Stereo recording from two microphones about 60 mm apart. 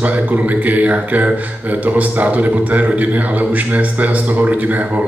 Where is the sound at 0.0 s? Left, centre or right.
Right.